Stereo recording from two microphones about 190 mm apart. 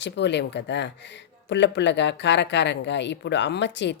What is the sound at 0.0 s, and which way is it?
Speech, 65° left (ahead or behind).